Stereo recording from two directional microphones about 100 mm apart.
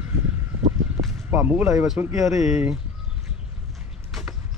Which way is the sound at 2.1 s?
Centre (ahead or behind).